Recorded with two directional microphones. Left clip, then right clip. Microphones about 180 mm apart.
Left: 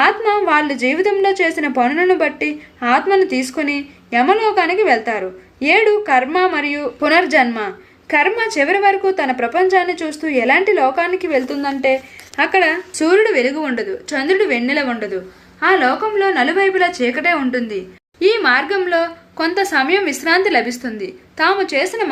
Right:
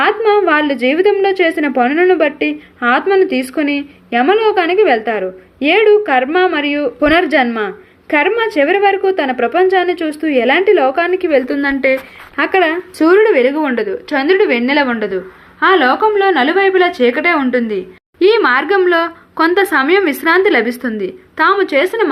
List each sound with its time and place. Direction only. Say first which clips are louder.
0.0 s a woman's voice: right 3 dB; 20° right (ahead or behind)
11.4 s speech: right 3 dB; 35° right (ahead or behind)
12.4 s a woman's voice: right 1 dB; 25° right (ahead or behind)